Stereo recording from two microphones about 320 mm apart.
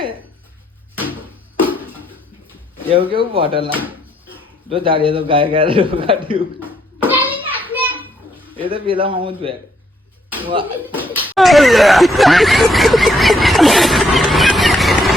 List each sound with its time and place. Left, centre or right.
0.9 s a sound: centre
2.9 s a man's voice: centre
3.7 s speech: centre
4.7 s a man's voice: centre
6.6 s a sound: centre
8.5 s a man's voice: centre
11.3 s snicker: centre